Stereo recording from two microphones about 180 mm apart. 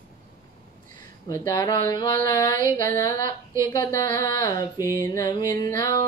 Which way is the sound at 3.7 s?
20° left (ahead or behind).